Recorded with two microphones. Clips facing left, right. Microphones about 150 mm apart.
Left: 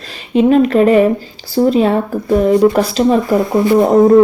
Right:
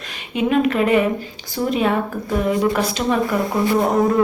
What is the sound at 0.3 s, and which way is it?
Speech, 35° left (ahead or behind).